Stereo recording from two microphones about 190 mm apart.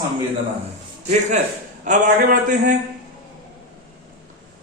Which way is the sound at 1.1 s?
40° right (ahead or behind).